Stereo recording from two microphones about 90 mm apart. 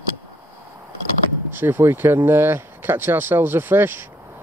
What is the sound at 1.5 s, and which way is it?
Speech, 25° right (ahead or behind).